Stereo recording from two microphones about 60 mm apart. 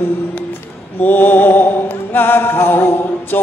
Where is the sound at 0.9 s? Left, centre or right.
Left.